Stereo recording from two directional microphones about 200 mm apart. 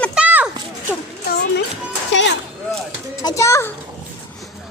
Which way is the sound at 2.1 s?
65° left (ahead or behind).